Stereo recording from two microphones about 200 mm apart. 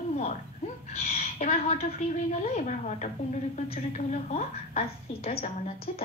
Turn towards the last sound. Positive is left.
turn(degrees=30)  # may be behind; listen again after turning